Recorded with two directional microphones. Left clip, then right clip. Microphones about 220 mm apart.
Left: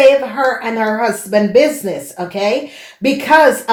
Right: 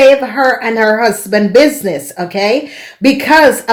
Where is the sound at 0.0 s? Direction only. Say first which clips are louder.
Right 3 dB; 40° right (ahead or behind).